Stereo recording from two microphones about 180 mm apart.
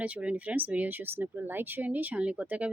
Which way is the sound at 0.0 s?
5° right (ahead or behind).